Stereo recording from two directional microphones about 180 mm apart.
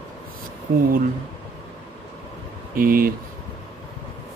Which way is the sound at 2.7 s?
50° right (ahead or behind).